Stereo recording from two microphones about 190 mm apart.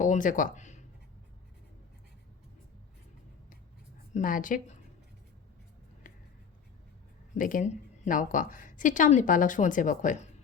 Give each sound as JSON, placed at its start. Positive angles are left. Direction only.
{"t": 0.0, "sound": "a sound", "side_deg": 45}
{"t": 4.1, "sound": "a woman's voice", "side_deg": 45}
{"t": 7.3, "sound": "a woman's voice", "side_deg": 45}